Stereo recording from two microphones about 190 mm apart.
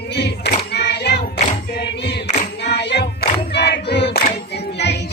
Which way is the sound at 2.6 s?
60° left (ahead or behind).